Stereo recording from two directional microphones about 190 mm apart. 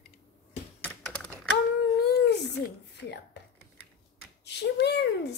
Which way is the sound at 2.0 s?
60° left (ahead or behind).